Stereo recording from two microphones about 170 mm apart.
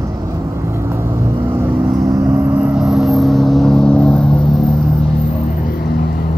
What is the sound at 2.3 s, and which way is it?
Vehicle, 10° right (ahead or behind).